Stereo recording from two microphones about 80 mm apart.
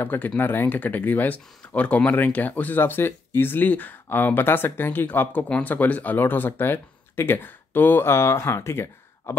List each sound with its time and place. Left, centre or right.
0.0 s speech: left